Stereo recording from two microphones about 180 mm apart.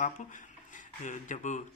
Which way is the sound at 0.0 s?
45° left (ahead or behind).